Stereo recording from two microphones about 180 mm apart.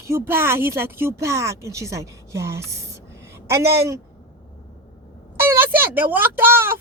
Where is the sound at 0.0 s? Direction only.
15° right (ahead or behind).